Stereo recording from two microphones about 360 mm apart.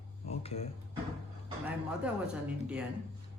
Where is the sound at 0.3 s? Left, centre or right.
Centre.